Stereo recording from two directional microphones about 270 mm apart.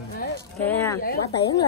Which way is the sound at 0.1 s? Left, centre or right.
Left.